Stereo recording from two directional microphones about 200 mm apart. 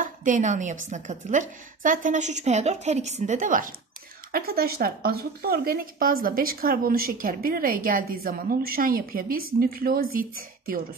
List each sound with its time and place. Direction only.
0.0 s a woman's voice: 40° right (ahead or behind)